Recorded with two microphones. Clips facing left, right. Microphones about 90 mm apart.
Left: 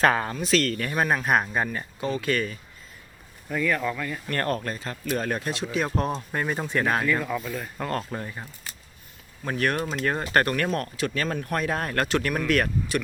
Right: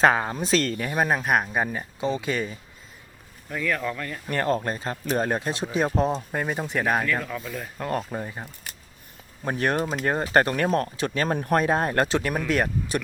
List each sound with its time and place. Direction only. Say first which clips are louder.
0.0 s speech: right 2 dB; 15° right (ahead or behind)
0.3 s speech: even; 35° right (ahead or behind)
0.8 s speech: right 1 dB; 10° right (ahead or behind)
3.5 s speech: left 2 dB; centre (ahead or behind)
4.3 s speech: right 4 dB; 15° right (ahead or behind); by 5.9 s 30° right (ahead or behind)
6.1 s speech: even; 5° right (ahead or behind)
7.0 s speech: left 2 dB; 5° left (ahead or behind)
7.9 s speech: right 3 dB; 10° right (ahead or behind)
9.4 s speech: right 1 dB; 30° right (ahead or behind)
9.8 s speech: right 2 dB; 15° right (ahead or behind)